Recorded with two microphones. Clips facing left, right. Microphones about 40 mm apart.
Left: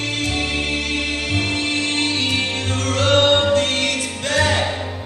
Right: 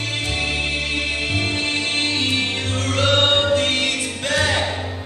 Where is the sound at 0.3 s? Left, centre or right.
Centre.